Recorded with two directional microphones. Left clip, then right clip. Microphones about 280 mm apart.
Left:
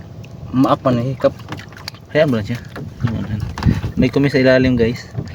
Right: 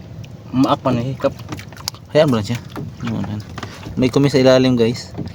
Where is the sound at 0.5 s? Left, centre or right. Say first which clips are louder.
Left 2 dB; centre.